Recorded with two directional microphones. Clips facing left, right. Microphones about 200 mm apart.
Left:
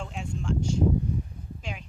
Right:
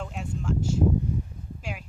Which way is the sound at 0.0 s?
5° right (ahead or behind).